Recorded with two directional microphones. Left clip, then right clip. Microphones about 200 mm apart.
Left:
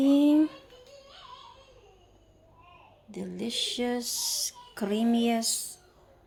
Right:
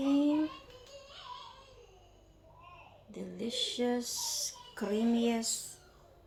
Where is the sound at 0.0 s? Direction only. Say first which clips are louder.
Left 7 dB; 55° left (ahead or behind).